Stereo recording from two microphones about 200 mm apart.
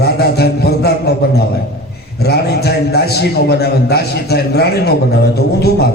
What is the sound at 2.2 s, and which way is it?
A man's voice, 55° left (ahead or behind).